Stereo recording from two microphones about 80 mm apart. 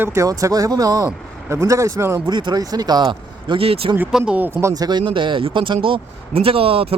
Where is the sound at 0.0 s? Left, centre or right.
Right.